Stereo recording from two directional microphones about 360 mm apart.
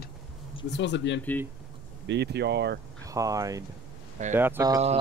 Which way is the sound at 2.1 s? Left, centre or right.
Right.